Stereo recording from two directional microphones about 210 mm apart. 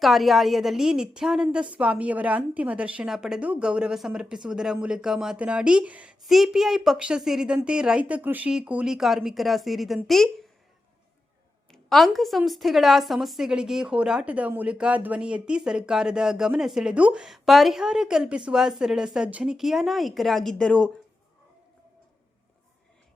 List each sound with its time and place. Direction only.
0.0 s a woman's voice: centre (ahead or behind)
11.7 s a woman's voice: centre (ahead or behind)